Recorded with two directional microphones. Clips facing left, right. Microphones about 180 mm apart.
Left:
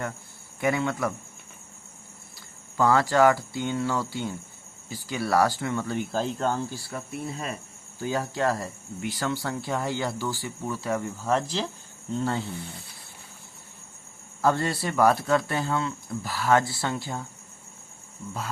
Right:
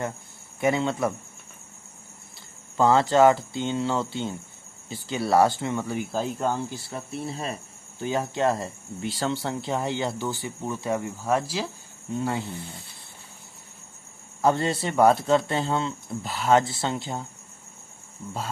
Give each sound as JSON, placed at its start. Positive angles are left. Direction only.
{"t": 0.6, "sound": "speech", "side_deg": -25}
{"t": 2.7, "sound": "speech", "side_deg": -25}
{"t": 6.7, "sound": "speech", "side_deg": -25}
{"t": 14.4, "sound": "speech", "side_deg": -20}